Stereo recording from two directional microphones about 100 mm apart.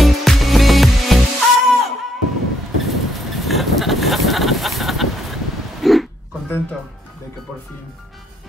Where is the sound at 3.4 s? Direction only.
Centre (ahead or behind).